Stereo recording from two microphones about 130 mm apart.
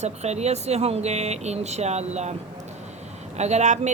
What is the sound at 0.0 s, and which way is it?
A woman's voice, 60° right (ahead or behind).